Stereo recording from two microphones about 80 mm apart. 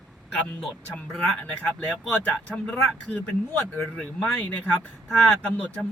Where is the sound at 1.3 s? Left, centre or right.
Centre.